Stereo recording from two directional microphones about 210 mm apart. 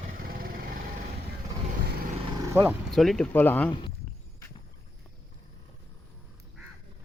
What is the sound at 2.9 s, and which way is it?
Speech, centre (ahead or behind).